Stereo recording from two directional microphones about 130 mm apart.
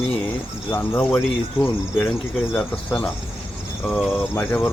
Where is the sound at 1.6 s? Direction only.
5° right (ahead or behind).